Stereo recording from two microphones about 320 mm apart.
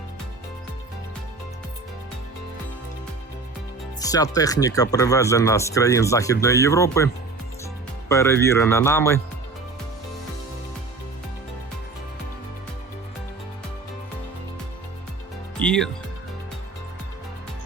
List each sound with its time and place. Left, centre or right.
4.0 s speech: centre
15.5 s speech: centre